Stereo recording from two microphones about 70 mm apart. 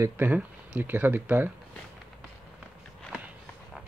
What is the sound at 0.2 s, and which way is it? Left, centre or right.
Speech, right.